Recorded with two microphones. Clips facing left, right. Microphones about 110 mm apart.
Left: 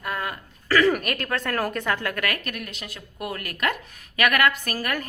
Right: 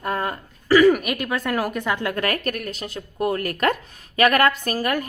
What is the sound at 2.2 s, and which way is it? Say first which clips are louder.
Speech: right 5 dB; 40° right (ahead or behind).